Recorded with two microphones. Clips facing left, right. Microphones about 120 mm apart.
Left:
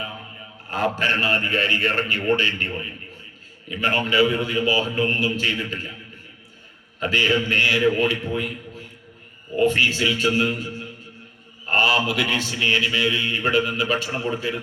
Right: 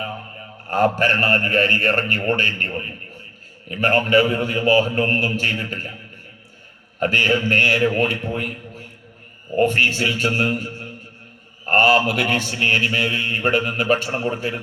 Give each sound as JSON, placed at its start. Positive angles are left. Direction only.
{"t": 0.7, "sound": "a man's voice", "side_deg": -50}
{"t": 3.7, "sound": "a man's voice", "side_deg": -50}
{"t": 7.0, "sound": "a man's voice", "side_deg": -50}
{"t": 9.6, "sound": "a man's voice", "side_deg": -50}